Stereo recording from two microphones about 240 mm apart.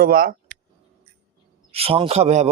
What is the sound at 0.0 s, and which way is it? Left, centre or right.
Speech, right.